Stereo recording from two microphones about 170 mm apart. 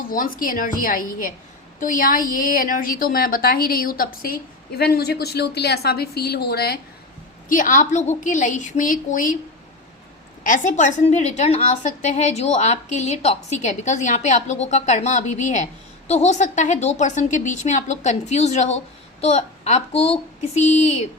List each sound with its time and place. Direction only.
0.1 s a woman's voice: 55° left (ahead or behind)
7.4 s a woman's voice: 50° left (ahead or behind)
10.4 s a woman's voice: 50° left (ahead or behind)